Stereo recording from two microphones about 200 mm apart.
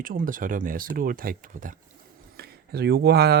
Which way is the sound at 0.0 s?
45° right (ahead or behind).